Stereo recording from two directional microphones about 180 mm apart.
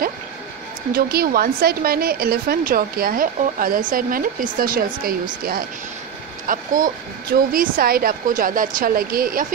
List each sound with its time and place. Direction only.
0.9 s a woman's voice: 55° right (ahead or behind)